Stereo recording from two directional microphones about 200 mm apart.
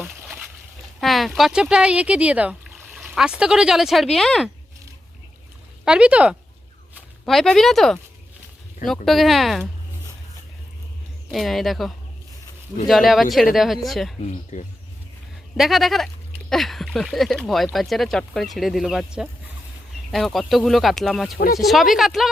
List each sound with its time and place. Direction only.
0.0 s a sound: 10° right (ahead or behind)
1.0 s speech: centre (ahead or behind)
5.8 s speech: 5° right (ahead or behind)
9.0 s speech: centre (ahead or behind)
11.3 s speech: centre (ahead or behind)
12.9 s speech: centre (ahead or behind)
14.5 s speech: 35° left (ahead or behind)
15.5 s speech: centre (ahead or behind)